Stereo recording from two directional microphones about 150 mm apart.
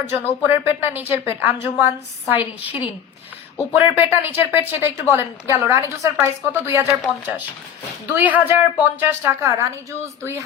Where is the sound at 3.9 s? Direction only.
15° right (ahead or behind).